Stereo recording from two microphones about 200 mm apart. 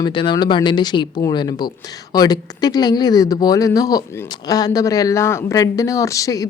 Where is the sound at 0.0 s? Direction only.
25° left (ahead or behind).